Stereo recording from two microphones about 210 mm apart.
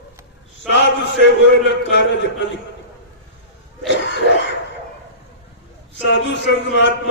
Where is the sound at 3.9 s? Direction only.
60° left (ahead or behind).